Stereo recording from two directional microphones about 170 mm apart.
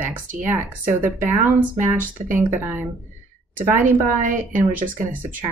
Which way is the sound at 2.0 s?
15° right (ahead or behind).